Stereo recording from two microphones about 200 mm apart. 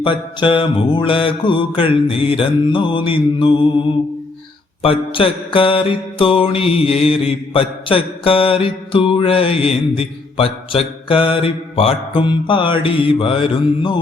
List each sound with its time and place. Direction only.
0.0 s mantra: 25° left (ahead or behind)
4.8 s mantra: 25° left (ahead or behind)